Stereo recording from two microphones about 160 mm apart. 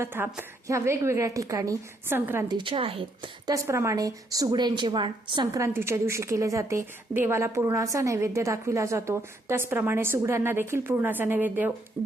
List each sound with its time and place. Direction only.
0.0 s a woman's voice: 15° right (ahead or behind)
2.5 s a woman's voice: 30° right (ahead or behind); by 11.7 s 10° right (ahead or behind)